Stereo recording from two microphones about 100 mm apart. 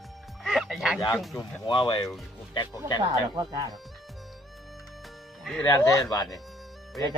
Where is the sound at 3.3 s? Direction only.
40° right (ahead or behind).